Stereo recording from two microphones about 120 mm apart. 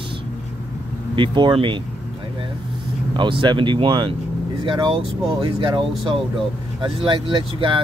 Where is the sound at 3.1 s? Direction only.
40° right (ahead or behind).